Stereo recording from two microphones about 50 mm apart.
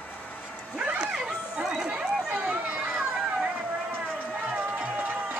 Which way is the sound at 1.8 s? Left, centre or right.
Right.